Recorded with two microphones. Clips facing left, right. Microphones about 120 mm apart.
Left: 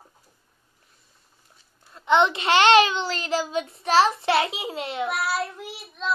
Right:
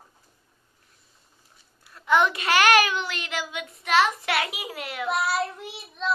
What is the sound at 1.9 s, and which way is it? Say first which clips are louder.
Child singing: left 2 dB; 25° left (ahead or behind).